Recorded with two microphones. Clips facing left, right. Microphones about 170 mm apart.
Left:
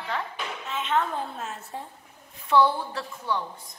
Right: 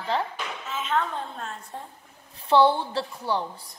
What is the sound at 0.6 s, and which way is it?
A woman's voice, centre (ahead or behind).